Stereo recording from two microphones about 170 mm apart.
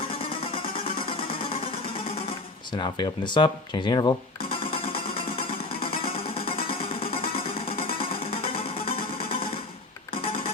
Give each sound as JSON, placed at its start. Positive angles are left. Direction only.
{"t": 0.3, "sound": "music", "side_deg": 30}
{"t": 2.7, "sound": "speech", "side_deg": 25}
{"t": 5.4, "sound": "music", "side_deg": 30}
{"t": 8.3, "sound": "music", "side_deg": 30}